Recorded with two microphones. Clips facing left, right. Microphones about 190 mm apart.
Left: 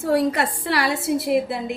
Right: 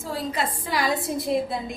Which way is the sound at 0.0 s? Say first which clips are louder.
Left 8 dB; 70° left (ahead or behind).